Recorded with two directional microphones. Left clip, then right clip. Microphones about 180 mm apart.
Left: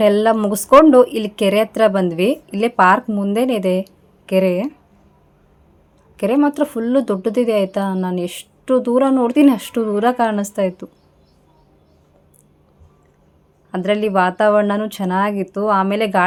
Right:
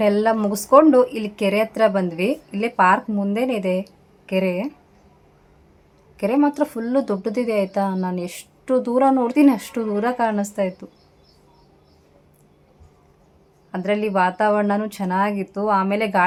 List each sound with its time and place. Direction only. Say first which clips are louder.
0.0 s speech: left 4 dB; 25° left (ahead or behind)
6.1 s speech: left 3 dB; 20° left (ahead or behind)
13.7 s speech: left 4 dB; 25° left (ahead or behind)